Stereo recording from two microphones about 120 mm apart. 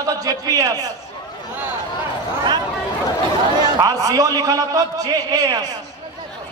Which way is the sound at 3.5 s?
35° right (ahead or behind).